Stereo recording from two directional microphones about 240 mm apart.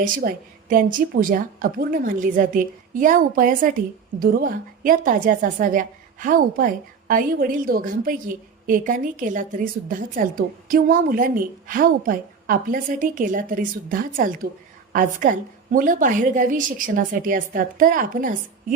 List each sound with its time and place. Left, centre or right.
0.0 s a woman's voice: right